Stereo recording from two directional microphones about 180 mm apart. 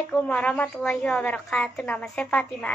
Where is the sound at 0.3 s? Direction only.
5° left (ahead or behind).